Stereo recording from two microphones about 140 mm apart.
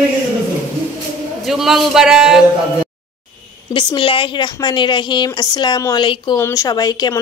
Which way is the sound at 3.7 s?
35° left (ahead or behind).